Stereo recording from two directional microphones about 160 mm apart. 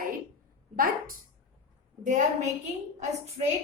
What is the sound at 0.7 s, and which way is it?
Speech, 60° right (ahead or behind).